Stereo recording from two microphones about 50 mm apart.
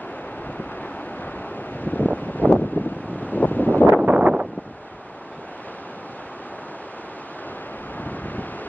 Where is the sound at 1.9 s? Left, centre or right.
Left.